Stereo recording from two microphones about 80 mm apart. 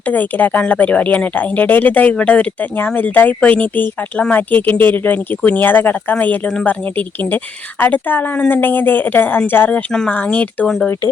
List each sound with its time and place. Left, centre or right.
0.0 s speech: left